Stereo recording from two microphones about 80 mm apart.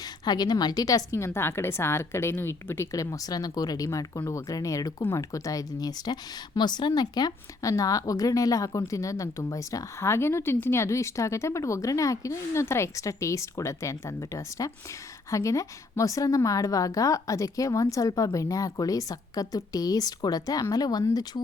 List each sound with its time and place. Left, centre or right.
0.3 s speech: left
2.9 s a woman's voice: left
6.6 s a woman's voice: left